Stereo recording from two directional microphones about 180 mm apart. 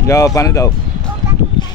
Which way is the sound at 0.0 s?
15° left (ahead or behind).